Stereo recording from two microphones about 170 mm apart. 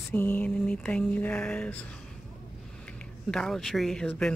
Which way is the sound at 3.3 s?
5° left (ahead or behind).